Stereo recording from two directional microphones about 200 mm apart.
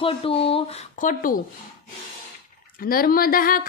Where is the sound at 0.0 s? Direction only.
30° left (ahead or behind).